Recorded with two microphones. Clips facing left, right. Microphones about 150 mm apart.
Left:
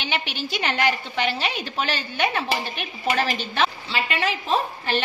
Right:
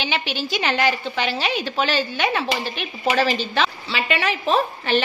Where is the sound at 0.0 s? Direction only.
90° right.